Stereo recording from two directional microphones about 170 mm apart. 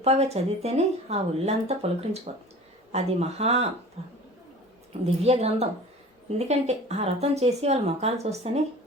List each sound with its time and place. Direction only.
0.0 s speech: 35° right (ahead or behind)